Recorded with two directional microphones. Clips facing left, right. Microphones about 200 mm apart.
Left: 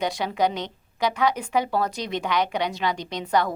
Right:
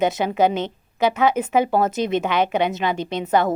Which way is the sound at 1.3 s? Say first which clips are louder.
Right 5 dB; 20° right (ahead or behind).